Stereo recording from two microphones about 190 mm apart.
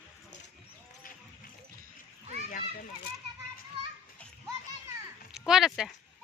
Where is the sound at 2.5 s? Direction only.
45° left (ahead or behind).